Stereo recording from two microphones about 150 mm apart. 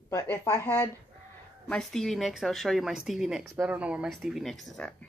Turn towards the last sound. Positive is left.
turn(degrees=5)  # may be behind; listen again after turning